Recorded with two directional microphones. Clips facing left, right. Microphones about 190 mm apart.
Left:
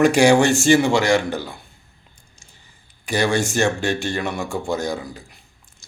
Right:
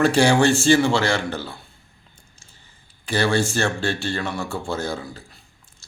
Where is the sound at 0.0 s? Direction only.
15° left (ahead or behind).